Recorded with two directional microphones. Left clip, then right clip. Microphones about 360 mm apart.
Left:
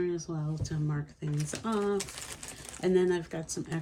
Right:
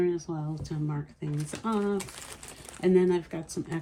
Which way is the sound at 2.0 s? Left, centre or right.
Centre.